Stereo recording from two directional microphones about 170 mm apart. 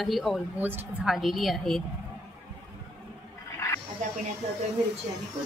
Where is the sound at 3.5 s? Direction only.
15° left (ahead or behind).